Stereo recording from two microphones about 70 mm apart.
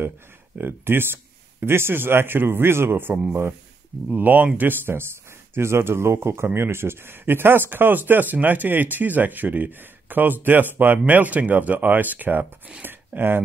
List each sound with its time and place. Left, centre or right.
0.6 s speech: right